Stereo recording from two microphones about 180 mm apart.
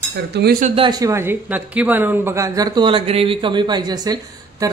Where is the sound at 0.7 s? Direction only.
20° right (ahead or behind).